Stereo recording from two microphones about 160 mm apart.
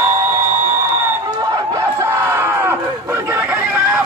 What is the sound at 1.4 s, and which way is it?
Crowd, 25° right (ahead or behind).